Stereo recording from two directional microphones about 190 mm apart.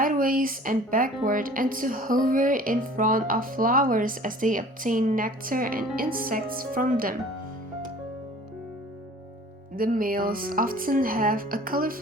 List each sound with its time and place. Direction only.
0.0 s speech: 45° right (ahead or behind)
9.7 s speech: 50° right (ahead or behind)